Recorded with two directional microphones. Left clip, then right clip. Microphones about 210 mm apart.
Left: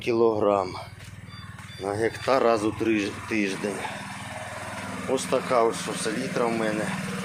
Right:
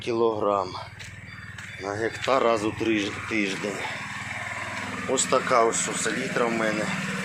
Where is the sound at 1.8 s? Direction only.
20° left (ahead or behind).